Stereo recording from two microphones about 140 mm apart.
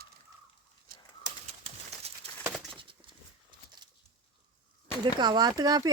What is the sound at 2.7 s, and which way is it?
Patter, 35° right (ahead or behind).